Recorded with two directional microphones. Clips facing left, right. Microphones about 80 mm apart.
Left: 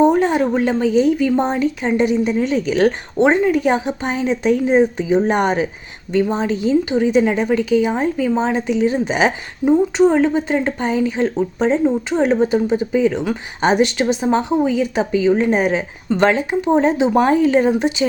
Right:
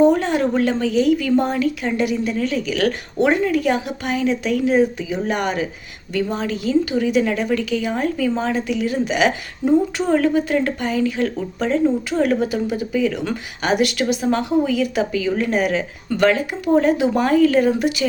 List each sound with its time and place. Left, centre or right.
0.0 s a woman's voice: centre